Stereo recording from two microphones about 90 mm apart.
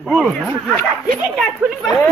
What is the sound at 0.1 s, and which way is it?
Speech, centre (ahead or behind).